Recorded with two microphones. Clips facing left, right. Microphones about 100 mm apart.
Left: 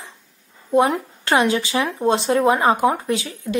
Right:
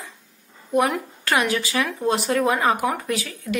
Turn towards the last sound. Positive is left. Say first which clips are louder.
# left 5 dB
turn(degrees=25)  # may be behind; listen again after turning